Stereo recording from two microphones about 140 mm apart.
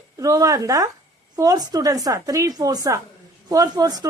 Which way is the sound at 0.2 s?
25° right (ahead or behind).